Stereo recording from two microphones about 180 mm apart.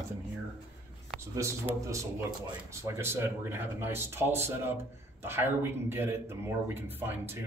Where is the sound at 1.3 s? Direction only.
15° right (ahead or behind).